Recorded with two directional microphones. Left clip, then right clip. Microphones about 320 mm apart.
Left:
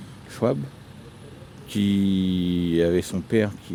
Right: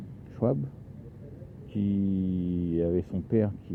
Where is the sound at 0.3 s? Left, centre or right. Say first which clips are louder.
Left 5 dB; left.